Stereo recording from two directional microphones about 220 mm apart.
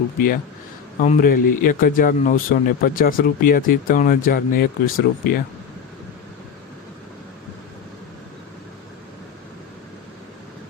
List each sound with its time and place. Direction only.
0.9 s speech: 35° left (ahead or behind)